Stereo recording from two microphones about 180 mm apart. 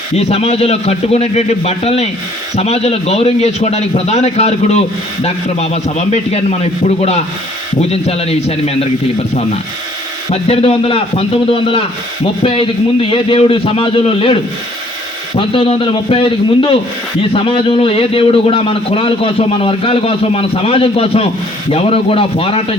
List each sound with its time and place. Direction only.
0.2 s a man's voice: 35° left (ahead or behind)
10.5 s a man's voice: 30° left (ahead or behind)
15.4 s a man's voice: 30° left (ahead or behind)